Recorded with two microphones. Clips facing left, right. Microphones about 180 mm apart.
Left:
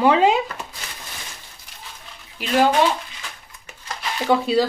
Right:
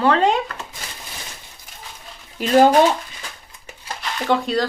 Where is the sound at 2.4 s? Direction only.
40° right (ahead or behind).